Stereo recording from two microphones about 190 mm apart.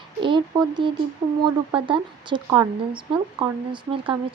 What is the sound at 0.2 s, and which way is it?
Speech, 25° right (ahead or behind).